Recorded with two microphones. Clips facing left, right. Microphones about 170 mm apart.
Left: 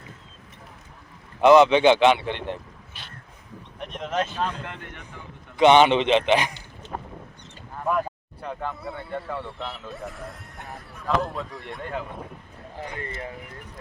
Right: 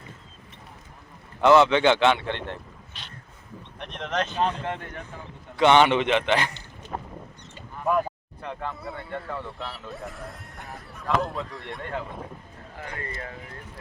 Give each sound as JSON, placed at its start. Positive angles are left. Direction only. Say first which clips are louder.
{"t": 1.4, "sound": "speech", "louder": "left 3 dB", "side_deg": 15}
{"t": 3.8, "sound": "speech", "louder": "left 1 dB", "side_deg": 5}
{"t": 4.4, "sound": "speech", "louder": "right 3 dB", "side_deg": -30}
{"t": 5.5, "sound": "a man's voice", "louder": "left 2 dB", "side_deg": 20}
{"t": 8.4, "sound": "speech", "louder": "left 2 dB", "side_deg": 5}
{"t": 12.8, "sound": "speech", "louder": "left 2 dB", "side_deg": 25}